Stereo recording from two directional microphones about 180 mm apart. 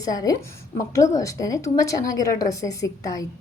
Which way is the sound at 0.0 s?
20° left (ahead or behind).